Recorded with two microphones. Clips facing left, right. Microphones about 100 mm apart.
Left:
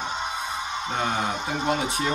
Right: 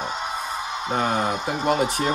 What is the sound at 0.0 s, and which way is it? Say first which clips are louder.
Music: right 1 dB; 45° right (ahead or behind).